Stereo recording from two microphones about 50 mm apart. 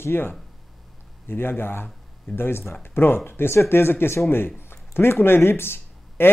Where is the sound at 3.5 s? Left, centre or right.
Left.